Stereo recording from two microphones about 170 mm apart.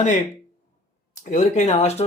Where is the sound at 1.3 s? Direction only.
45° left (ahead or behind).